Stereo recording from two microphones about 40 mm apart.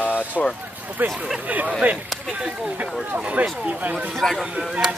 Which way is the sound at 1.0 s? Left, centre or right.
Right.